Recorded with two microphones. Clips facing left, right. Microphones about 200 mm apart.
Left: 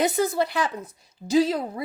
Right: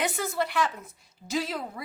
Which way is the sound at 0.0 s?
35° left (ahead or behind).